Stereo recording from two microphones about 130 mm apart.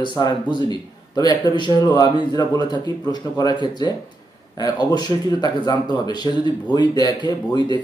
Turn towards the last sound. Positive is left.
turn(degrees=35)  # may be behind; listen again after turning